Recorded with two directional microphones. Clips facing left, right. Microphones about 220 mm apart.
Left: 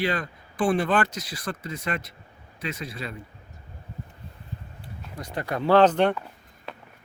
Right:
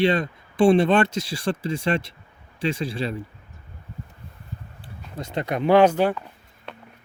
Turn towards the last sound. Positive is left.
turn(degrees=-5)  # may be behind; listen again after turning